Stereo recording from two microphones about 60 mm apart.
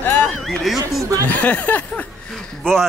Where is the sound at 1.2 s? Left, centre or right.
Left.